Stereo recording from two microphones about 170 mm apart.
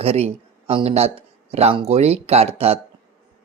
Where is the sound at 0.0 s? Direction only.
35° right (ahead or behind).